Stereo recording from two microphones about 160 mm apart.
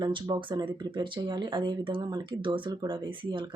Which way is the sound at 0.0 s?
30° right (ahead or behind).